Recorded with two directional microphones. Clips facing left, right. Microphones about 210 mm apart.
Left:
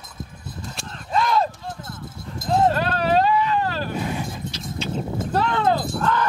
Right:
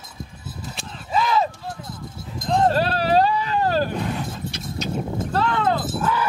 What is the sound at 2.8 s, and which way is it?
Vehicle, 35° right (ahead or behind).